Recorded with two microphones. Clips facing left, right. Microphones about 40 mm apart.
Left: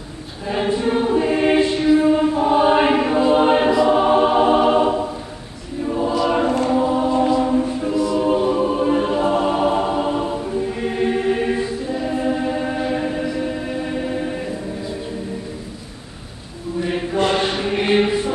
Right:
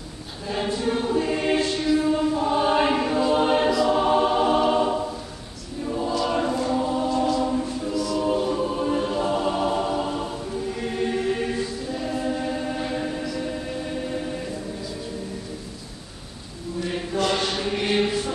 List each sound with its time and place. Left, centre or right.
0.5 s choir: left
16.8 s chant: left